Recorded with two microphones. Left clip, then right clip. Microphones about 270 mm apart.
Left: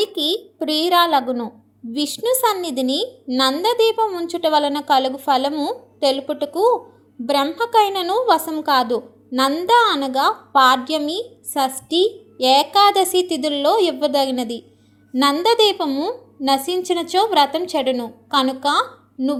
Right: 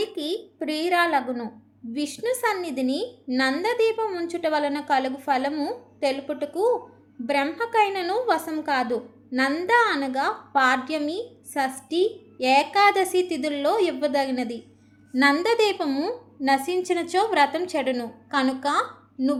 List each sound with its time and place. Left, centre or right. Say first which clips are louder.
0.0 s a woman's voice: left 8 dB; centre